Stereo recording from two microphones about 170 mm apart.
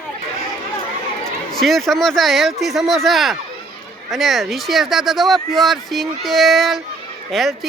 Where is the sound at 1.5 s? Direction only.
Centre (ahead or behind).